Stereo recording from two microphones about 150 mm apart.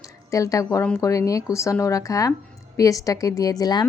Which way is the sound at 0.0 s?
20° left (ahead or behind).